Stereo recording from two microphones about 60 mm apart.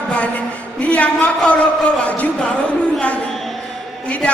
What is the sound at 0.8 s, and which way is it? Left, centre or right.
A man's voice, left.